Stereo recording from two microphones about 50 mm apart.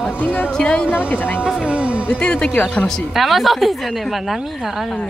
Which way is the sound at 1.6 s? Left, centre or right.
Right.